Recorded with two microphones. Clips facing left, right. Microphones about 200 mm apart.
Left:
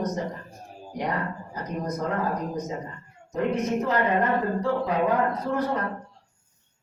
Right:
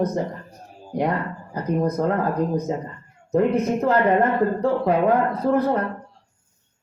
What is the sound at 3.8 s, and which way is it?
Speech, 60° right (ahead or behind).